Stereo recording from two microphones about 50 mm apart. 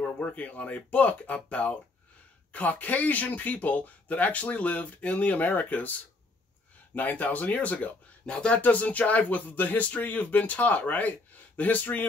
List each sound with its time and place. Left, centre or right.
0.0 s speech: left